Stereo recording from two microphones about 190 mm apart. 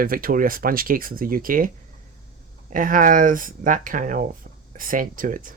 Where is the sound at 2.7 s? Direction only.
45° right (ahead or behind).